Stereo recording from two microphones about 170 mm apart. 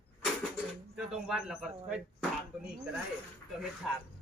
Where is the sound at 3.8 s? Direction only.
Centre (ahead or behind).